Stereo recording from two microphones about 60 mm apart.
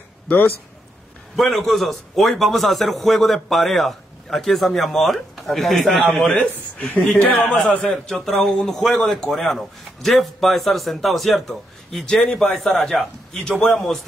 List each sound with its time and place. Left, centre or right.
1.3 s a man's voice: centre
6.3 s speech: left
7.8 s a man's voice: centre